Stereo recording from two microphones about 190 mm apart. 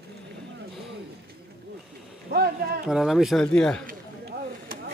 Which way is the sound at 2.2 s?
55° right (ahead or behind).